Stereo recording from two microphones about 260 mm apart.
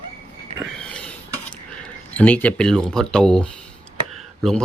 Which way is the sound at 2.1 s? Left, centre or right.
Centre.